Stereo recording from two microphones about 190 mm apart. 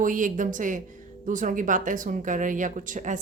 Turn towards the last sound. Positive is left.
turn(degrees=-40)  # may be behind; listen again after turning